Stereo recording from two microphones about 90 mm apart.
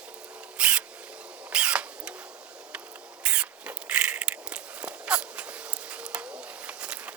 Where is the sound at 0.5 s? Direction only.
10° right (ahead or behind).